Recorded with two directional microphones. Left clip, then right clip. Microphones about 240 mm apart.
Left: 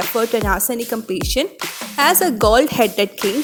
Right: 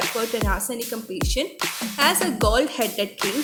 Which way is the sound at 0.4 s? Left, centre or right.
Left.